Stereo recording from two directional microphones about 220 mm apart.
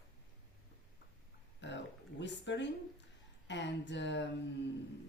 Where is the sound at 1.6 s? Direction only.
55° left (ahead or behind).